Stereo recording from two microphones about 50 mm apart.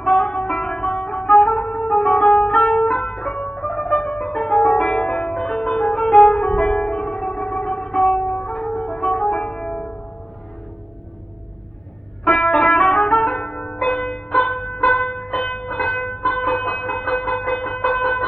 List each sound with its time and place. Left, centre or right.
0.0 s music: centre
7.3 s shofar: centre
7.7 s music: centre
12.3 s music: centre
15.7 s train: centre
16.8 s a sound: centre
17.4 s shofar: centre